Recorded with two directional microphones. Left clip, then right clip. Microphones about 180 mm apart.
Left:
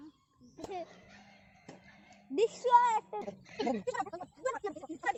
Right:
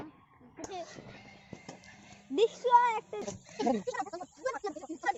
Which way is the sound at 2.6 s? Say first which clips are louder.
Even; 5° right (ahead or behind).